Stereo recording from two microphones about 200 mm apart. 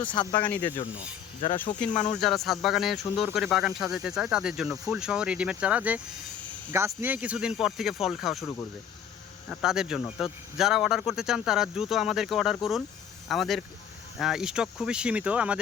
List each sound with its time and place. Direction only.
0.0 s speech: 25° left (ahead or behind)
1.8 s speech: 5° left (ahead or behind)
9.6 s speech: 5° right (ahead or behind)